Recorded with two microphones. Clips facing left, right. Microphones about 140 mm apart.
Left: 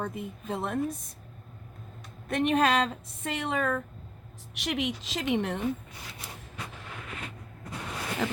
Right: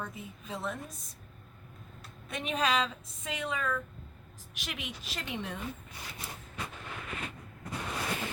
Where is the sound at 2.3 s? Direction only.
55° left (ahead or behind).